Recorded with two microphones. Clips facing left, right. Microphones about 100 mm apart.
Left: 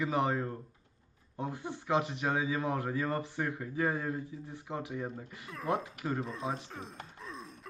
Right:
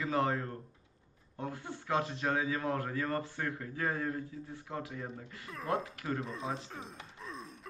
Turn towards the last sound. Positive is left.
turn(degrees=0)  # may be behind; listen again after turning